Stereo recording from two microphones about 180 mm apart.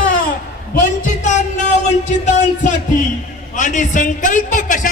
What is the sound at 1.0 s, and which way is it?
A man's voice, 40° left (ahead or behind).